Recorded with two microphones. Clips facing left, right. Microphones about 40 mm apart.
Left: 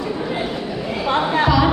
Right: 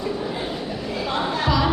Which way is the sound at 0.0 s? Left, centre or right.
Left.